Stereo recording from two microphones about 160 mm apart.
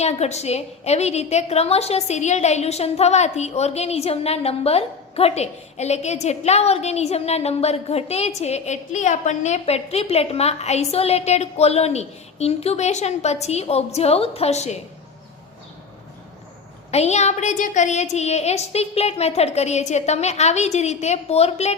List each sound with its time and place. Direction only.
0.0 s a woman's voice: 45° left (ahead or behind)
16.9 s a woman's voice: 45° left (ahead or behind)